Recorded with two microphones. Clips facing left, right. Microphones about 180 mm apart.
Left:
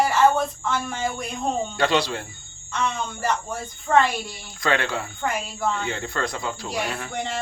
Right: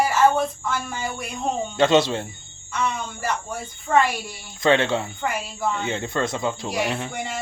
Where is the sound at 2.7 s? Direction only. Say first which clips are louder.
Even; 10° right (ahead or behind).